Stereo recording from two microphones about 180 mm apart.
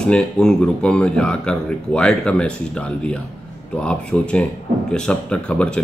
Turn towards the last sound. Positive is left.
turn(degrees=5)  # may be behind; listen again after turning